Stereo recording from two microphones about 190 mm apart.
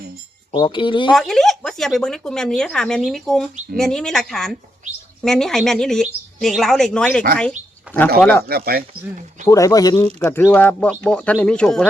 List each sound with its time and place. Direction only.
0.5 s speech: 25° left (ahead or behind)
1.1 s speech: centre (ahead or behind)
7.9 s a sound: 10° right (ahead or behind)
8.2 s speech: 10° left (ahead or behind)
8.4 s speech: 55° right (ahead or behind)
9.5 s speech: 15° left (ahead or behind)